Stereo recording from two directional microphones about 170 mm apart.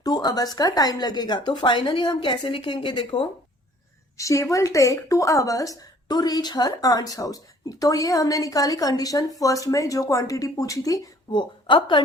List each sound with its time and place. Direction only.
0.0 s a woman's voice: 25° left (ahead or behind)